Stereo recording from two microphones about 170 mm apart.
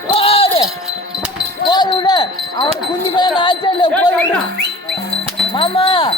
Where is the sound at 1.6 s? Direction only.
25° left (ahead or behind).